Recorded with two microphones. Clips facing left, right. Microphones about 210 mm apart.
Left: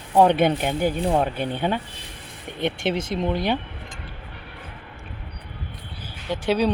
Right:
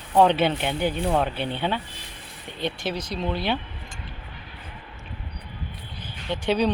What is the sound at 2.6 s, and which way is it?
Speech, 25° left (ahead or behind).